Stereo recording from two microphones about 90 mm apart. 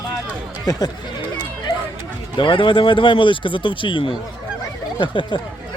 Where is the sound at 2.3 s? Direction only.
65° left (ahead or behind).